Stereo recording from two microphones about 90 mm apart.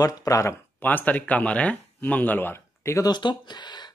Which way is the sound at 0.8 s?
20° left (ahead or behind).